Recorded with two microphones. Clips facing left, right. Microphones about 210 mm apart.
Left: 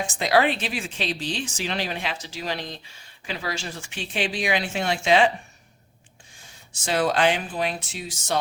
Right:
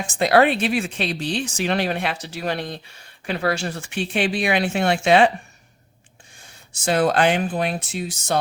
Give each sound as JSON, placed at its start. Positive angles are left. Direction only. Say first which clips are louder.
{"t": 0.2, "sound": "speech", "louder": "right 5 dB", "side_deg": -55}
{"t": 6.8, "sound": "speech", "louder": "right 3 dB", "side_deg": -50}